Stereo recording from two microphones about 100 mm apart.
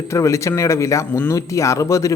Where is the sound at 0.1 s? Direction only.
30° left (ahead or behind).